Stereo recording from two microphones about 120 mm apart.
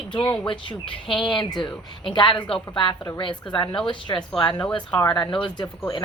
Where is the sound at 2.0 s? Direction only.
45° left (ahead or behind).